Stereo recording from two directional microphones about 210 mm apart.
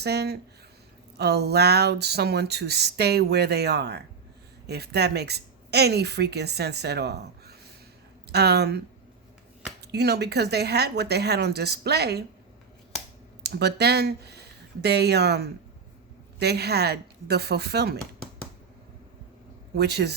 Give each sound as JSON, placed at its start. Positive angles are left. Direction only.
{"t": 0.0, "sound": "a woman's voice", "side_deg": -50}
{"t": 9.8, "sound": "a woman's voice", "side_deg": -50}
{"t": 13.4, "sound": "a woman's voice", "side_deg": -50}
{"t": 19.7, "sound": "a woman's voice", "side_deg": -50}